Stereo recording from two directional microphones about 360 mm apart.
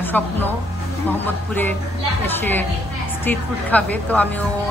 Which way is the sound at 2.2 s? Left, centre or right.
Centre.